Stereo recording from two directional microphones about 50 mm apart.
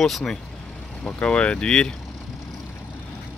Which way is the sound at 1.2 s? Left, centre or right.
Left.